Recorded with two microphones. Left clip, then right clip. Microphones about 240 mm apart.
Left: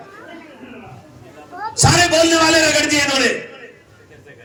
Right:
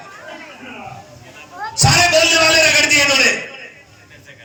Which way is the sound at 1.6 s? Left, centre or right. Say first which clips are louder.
Right 1 dB; left.